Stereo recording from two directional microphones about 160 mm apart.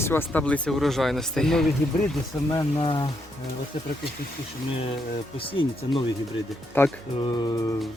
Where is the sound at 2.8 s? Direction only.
30° left (ahead or behind).